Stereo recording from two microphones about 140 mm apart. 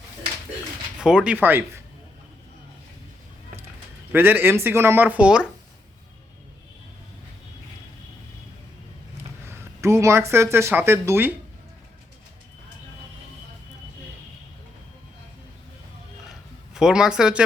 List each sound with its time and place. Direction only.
1.0 s speech: 5° right (ahead or behind)
4.1 s speech: 15° right (ahead or behind)
9.5 s speech: 20° right (ahead or behind)
16.3 s a sound: 5° right (ahead or behind)